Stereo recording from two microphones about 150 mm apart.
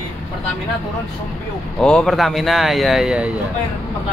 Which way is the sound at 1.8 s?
5° left (ahead or behind).